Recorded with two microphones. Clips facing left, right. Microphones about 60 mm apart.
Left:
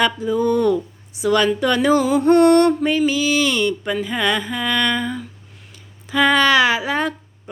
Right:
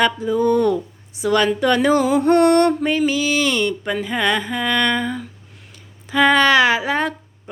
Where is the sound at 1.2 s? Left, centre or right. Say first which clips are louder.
Even; right.